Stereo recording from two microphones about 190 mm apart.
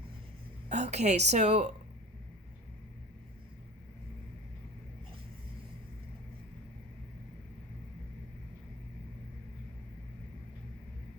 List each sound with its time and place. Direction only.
0.7 s a woman's voice: 35° right (ahead or behind)